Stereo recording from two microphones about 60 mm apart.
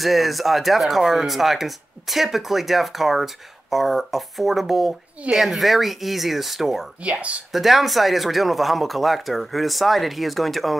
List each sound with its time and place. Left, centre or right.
0.0 s speech: centre
7.0 s speech: right
7.5 s speech: centre